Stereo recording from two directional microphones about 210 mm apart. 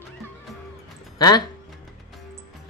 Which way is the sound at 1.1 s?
20° left (ahead or behind).